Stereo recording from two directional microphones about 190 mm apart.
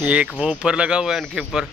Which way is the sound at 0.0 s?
5° right (ahead or behind).